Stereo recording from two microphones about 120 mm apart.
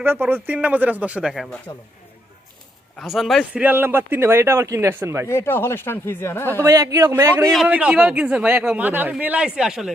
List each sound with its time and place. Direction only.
0.0 s speech: 15° right (ahead or behind)
3.0 s speech: centre (ahead or behind)
3.5 s speech: 15° right (ahead or behind)
5.3 s speech: 20° left (ahead or behind)
6.6 s speech: 25° right (ahead or behind)
7.7 s speech: 10° right (ahead or behind)